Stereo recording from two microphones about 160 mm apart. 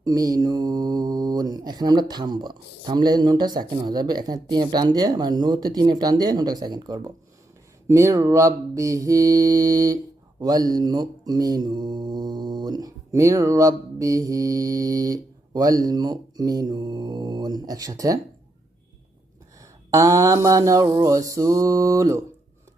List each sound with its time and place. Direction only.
0.0 s mantra: 25° right (ahead or behind)
19.6 s mantra: 20° right (ahead or behind)